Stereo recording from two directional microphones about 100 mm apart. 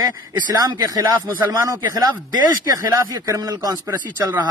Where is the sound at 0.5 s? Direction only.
40° right (ahead or behind).